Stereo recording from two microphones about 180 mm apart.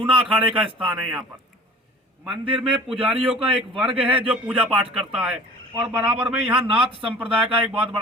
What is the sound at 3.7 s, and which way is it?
Speech, 30° right (ahead or behind).